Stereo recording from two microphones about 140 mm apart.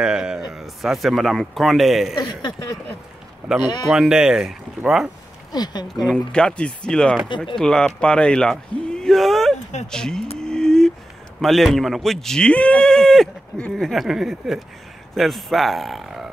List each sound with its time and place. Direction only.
0.0 s speech: 5° right (ahead or behind)
2.1 s a sound: 30° left (ahead or behind)
3.9 s speech: 5° right (ahead or behind)
5.5 s speech: 30° left (ahead or behind)
6.3 s speech: 5° left (ahead or behind)
7.2 s speech: 35° left (ahead or behind)
7.5 s speech: 5° left (ahead or behind)
10.4 s a sound: 5° left (ahead or behind)
11.4 s speech: centre (ahead or behind)